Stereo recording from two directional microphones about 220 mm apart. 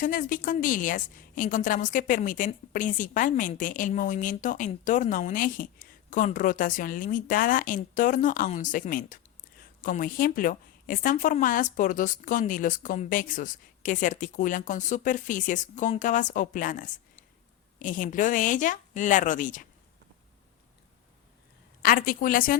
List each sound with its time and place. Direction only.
0.0 s a woman's voice: 40° left (ahead or behind)
21.8 s a woman's voice: 40° left (ahead or behind)